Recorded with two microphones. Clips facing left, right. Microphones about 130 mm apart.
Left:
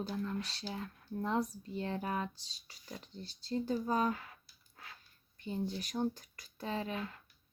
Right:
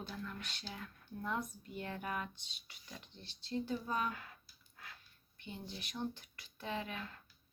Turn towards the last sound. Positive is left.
turn(degrees=35)  # may be behind; listen again after turning